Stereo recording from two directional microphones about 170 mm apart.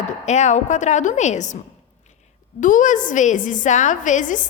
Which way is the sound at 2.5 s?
50° left (ahead or behind).